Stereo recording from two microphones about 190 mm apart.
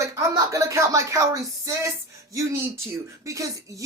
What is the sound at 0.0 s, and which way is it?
Speech, 15° right (ahead or behind).